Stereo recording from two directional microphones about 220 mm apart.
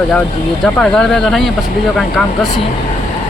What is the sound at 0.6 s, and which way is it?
Speech, 5° left (ahead or behind).